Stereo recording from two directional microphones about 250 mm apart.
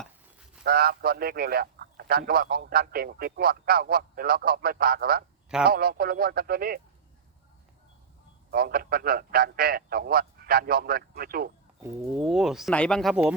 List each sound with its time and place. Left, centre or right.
0.6 s a man's voice: right
8.4 s a man's voice: right
11.8 s speech: centre